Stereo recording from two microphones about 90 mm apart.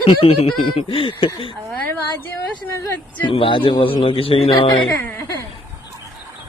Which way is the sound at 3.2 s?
75° left (ahead or behind).